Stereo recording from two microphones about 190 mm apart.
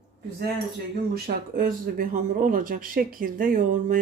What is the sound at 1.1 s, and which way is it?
Speech, 50° right (ahead or behind).